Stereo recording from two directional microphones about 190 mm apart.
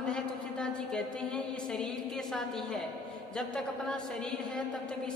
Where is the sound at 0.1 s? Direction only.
5° left (ahead or behind).